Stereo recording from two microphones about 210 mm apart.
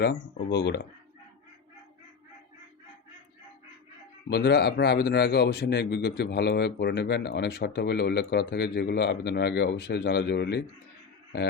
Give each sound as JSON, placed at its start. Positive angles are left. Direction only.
{"t": 0.0, "sound": "a man's voice", "side_deg": 55}
{"t": 4.3, "sound": "a man's voice", "side_deg": 50}